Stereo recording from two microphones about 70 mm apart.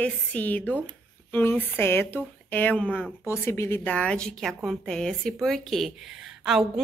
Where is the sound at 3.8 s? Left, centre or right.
Centre.